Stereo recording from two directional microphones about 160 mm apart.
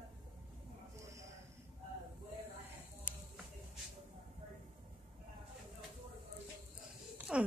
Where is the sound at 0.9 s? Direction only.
20° right (ahead or behind).